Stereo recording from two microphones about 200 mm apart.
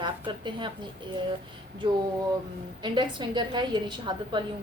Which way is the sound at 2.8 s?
20° right (ahead or behind).